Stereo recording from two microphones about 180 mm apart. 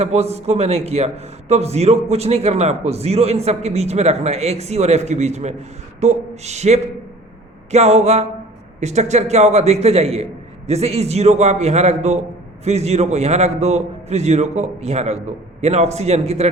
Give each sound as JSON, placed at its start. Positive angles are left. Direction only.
{"t": 0.0, "sound": "a man's voice", "side_deg": -35}